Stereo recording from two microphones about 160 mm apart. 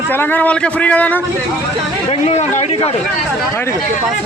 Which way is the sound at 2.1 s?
40° left (ahead or behind).